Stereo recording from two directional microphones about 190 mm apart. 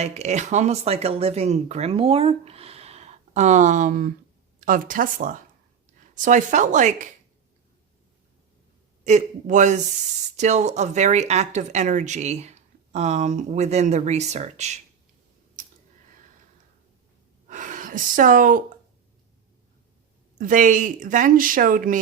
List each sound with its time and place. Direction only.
0.0 s speech: 35° right (ahead or behind)
9.0 s speech: 40° right (ahead or behind)
17.5 s speech: 45° right (ahead or behind)
20.4 s speech: 45° right (ahead or behind)